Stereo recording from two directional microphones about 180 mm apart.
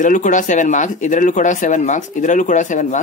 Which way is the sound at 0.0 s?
45° left (ahead or behind).